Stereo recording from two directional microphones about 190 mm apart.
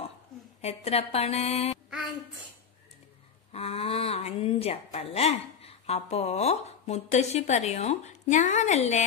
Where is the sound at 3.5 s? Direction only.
30° left (ahead or behind).